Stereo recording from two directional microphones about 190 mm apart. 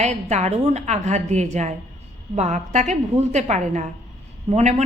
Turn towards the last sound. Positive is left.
turn(degrees=-35)  # may be behind; listen again after turning